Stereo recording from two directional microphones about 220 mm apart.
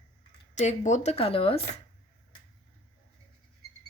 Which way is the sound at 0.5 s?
35° left (ahead or behind).